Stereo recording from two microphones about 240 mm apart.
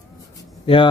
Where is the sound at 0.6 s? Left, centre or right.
Left.